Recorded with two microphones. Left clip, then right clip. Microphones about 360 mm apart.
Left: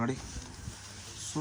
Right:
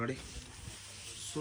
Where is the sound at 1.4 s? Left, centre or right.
Centre.